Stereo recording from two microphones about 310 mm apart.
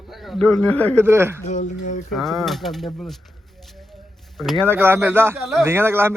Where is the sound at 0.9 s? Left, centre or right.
Centre.